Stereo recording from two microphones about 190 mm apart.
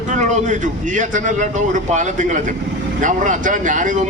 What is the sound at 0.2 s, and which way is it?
A man's voice, 40° right (ahead or behind).